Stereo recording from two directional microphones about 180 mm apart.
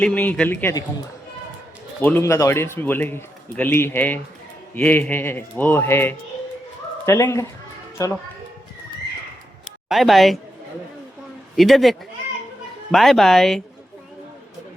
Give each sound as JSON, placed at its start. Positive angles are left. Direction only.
{"t": 0.0, "sound": "a man's voice", "side_deg": 5}
{"t": 2.0, "sound": "a man's voice", "side_deg": 10}
{"t": 9.6, "sound": "a sound", "side_deg": 0}
{"t": 11.5, "sound": "speech", "side_deg": 0}